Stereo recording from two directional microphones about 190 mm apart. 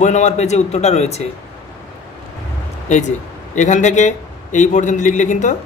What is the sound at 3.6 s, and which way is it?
Speech, 40° left (ahead or behind).